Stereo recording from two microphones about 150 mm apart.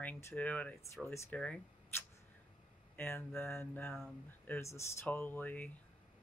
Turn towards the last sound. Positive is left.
turn(degrees=10)  # may be behind; listen again after turning